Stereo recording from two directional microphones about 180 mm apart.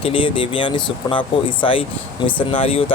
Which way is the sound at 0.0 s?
30° left (ahead or behind).